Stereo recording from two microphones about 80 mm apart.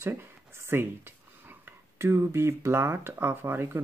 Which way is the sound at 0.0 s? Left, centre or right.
Right.